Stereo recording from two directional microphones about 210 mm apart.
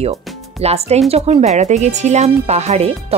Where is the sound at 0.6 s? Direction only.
30° right (ahead or behind).